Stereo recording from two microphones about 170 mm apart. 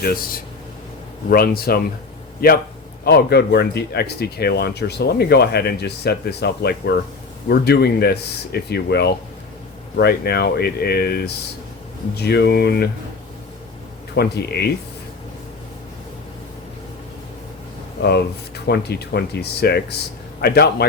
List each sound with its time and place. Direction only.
0.0 s a man's voice: 60° left (ahead or behind)
14.2 s speech: 70° left (ahead or behind)
18.0 s speech: 75° left (ahead or behind)